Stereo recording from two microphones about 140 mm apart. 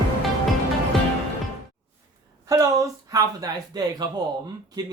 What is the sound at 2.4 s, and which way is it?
Speech, 25° right (ahead or behind).